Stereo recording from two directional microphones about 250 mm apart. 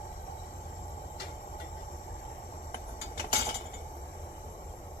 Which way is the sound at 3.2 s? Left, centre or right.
Left.